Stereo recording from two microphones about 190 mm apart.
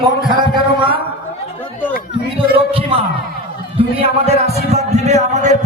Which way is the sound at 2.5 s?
30° right (ahead or behind).